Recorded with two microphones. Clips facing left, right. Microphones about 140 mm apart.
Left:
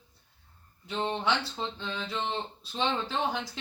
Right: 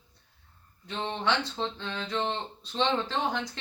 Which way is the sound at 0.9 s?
10° left (ahead or behind).